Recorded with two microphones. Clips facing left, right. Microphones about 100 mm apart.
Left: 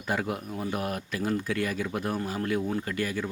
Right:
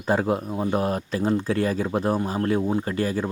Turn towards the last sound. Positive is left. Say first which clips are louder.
# right 6 dB
turn(degrees=-35)  # may be behind; listen again after turning